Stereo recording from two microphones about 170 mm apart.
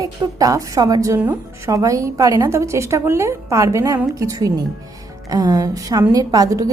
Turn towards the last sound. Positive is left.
turn(degrees=-20)  # may be behind; listen again after turning